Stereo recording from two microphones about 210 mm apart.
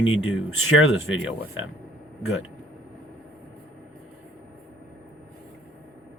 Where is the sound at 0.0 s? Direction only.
70° left (ahead or behind).